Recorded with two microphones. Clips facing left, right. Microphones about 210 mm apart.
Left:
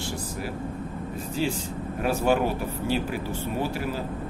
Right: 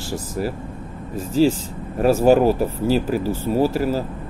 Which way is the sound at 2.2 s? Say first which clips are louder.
Right 9 dB; 40° right (ahead or behind).